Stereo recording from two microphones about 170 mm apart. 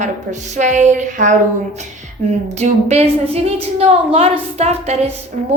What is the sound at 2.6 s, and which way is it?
A woman's voice, 40° right (ahead or behind).